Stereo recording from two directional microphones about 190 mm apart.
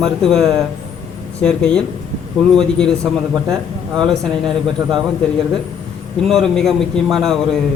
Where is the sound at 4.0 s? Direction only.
Centre (ahead or behind).